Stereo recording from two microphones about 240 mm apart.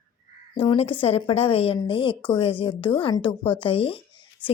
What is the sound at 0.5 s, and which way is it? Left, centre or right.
A woman's voice, left.